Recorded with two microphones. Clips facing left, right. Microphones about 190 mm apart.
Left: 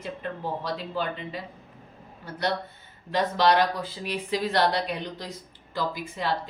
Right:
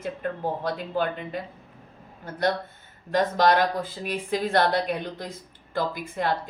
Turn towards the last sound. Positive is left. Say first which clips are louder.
# right 2 dB
turn(degrees=-50)  # may be behind; listen again after turning